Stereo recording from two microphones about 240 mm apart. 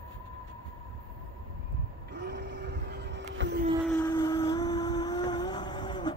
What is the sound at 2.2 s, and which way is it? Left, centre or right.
Vehicle, right.